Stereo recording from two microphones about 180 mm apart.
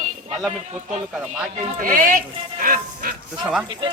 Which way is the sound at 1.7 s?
50° right (ahead or behind).